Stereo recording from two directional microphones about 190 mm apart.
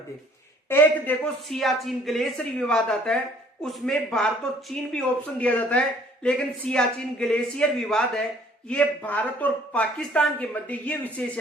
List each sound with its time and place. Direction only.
0.7 s a woman's voice: 10° left (ahead or behind)